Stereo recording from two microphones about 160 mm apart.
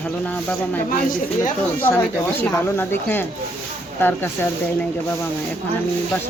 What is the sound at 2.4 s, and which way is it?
Speech, 15° left (ahead or behind).